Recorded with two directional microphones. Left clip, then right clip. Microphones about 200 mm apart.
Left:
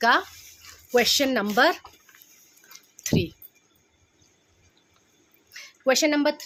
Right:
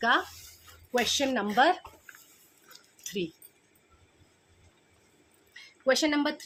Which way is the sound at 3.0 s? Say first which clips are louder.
Left 8 dB; 50° left (ahead or behind).